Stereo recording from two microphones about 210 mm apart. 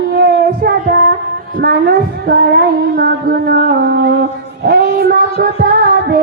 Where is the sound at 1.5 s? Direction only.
45° right (ahead or behind).